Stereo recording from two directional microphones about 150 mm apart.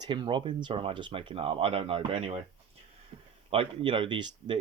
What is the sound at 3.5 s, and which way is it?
Speech, 35° right (ahead or behind).